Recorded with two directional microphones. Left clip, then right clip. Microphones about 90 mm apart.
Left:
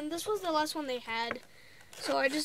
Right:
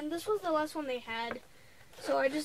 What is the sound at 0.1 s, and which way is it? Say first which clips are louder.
Speech: even; 25° left (ahead or behind).